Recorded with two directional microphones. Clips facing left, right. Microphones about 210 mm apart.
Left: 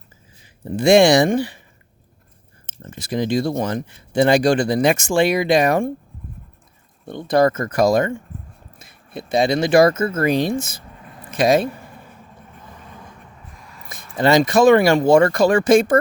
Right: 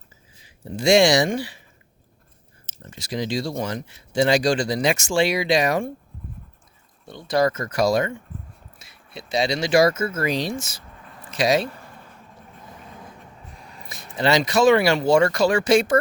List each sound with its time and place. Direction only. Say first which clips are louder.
0.4 s speech: left 4 dB; 55° left (ahead or behind)
2.8 s speech: left 5 dB; 55° left (ahead or behind)
7.0 s speech: left 5 dB; 55° left (ahead or behind)
13.8 s speech: left 4 dB; 50° left (ahead or behind)